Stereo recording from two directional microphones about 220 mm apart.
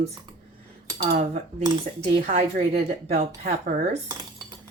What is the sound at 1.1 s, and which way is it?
Speech, 30° right (ahead or behind).